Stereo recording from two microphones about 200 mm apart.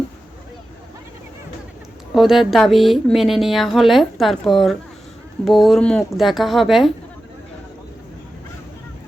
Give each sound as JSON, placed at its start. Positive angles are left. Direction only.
{"t": 2.1, "sound": "speech", "side_deg": 0}